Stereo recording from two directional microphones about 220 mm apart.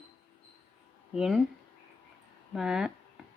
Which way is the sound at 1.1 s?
Centre (ahead or behind).